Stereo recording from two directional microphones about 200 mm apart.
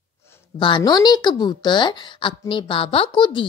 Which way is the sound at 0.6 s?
20° left (ahead or behind).